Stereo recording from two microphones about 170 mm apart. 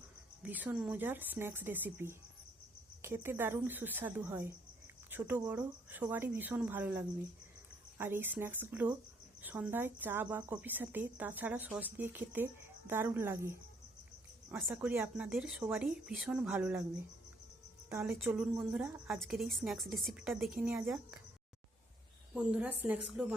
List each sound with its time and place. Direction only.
0.4 s speech: 10° right (ahead or behind)
14.7 s speech: 10° right (ahead or behind)
18.1 s speech: 10° right (ahead or behind)
22.4 s speech: 5° right (ahead or behind)